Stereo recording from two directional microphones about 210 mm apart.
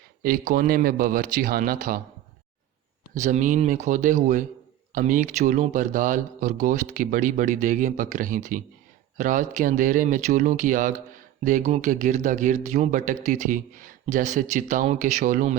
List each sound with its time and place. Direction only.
0.2 s speech: 45° right (ahead or behind)
3.2 s speech: 35° right (ahead or behind)